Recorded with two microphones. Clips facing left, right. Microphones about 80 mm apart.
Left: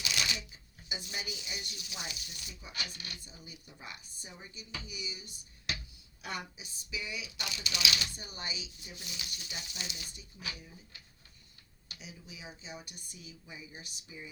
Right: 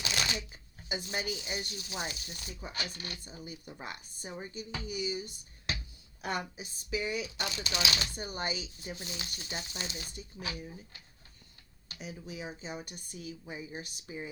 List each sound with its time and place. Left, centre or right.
0.0 s speech: right